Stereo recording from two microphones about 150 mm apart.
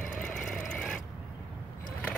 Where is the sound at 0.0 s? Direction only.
5° left (ahead or behind).